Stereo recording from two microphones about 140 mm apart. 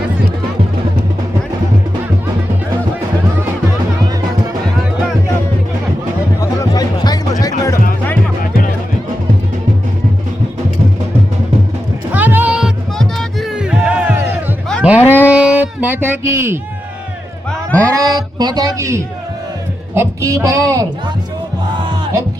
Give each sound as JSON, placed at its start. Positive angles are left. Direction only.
{"t": 6.4, "sound": "music", "side_deg": 25}
{"t": 12.1, "sound": "music", "side_deg": -10}
{"t": 15.0, "sound": "a sound", "side_deg": 15}
{"t": 15.3, "sound": "music", "side_deg": -10}
{"t": 17.5, "sound": "a sound", "side_deg": 10}
{"t": 17.8, "sound": "a man's voice", "side_deg": -25}
{"t": 21.8, "sound": "music", "side_deg": -30}